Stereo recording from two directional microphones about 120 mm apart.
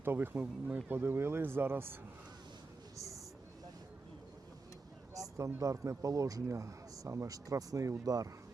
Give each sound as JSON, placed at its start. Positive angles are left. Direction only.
{"t": 0.0, "sound": "speech", "side_deg": -20}
{"t": 5.1, "sound": "speech", "side_deg": -25}